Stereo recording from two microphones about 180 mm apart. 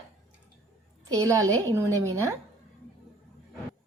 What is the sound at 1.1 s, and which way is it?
A woman's voice, 20° right (ahead or behind).